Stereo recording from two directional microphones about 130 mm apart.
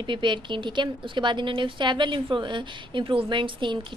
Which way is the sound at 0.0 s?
40° right (ahead or behind).